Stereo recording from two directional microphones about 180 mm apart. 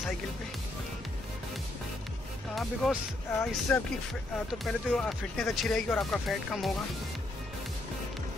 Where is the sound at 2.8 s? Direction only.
Centre (ahead or behind).